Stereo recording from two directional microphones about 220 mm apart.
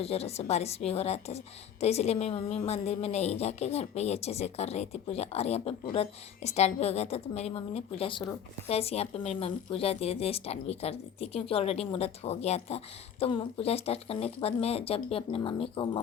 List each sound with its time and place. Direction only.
0.0 s speech: 25° left (ahead or behind)